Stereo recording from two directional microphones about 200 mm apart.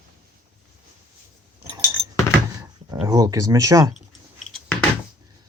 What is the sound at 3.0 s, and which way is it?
Speech, 15° right (ahead or behind).